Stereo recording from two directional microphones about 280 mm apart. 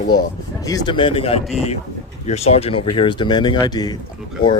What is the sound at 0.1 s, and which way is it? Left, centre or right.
A man's voice, centre.